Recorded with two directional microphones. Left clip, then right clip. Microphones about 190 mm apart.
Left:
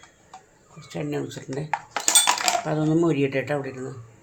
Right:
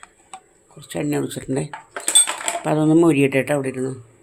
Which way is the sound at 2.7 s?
40° right (ahead or behind).